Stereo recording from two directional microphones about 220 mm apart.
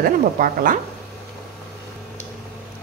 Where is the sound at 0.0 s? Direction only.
40° right (ahead or behind).